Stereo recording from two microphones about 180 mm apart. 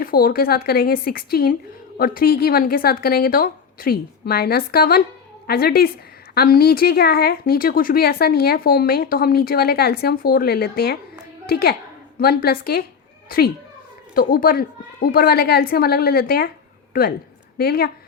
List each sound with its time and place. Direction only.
0.0 s speech: 55° left (ahead or behind)
17.6 s speech: 60° left (ahead or behind)